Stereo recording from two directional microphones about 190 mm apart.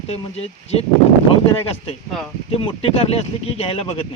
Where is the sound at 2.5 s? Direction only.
30° left (ahead or behind).